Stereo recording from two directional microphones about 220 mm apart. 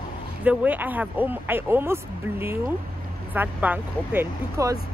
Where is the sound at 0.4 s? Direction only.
5° right (ahead or behind).